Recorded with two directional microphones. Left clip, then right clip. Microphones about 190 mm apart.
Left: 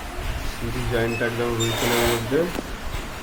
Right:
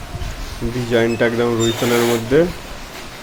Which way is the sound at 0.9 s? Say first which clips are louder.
Right 8 dB; 45° right (ahead or behind).